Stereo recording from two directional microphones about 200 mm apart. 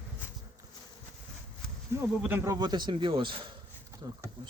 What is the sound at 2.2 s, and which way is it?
Speech, 10° right (ahead or behind).